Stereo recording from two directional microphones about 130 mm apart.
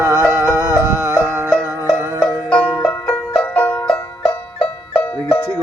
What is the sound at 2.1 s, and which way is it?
Music, 10° left (ahead or behind).